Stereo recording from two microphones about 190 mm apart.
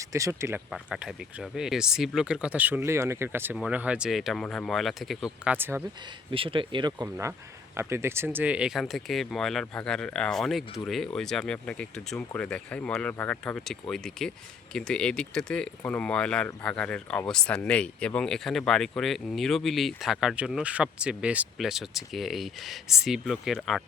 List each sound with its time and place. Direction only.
0.0 s speech: 15° right (ahead or behind)
0.7 s speech: 5° right (ahead or behind)
6.3 s speech: 30° right (ahead or behind); by 23.8 s centre (ahead or behind)